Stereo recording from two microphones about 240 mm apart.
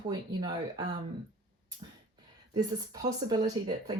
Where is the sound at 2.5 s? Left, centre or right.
Centre.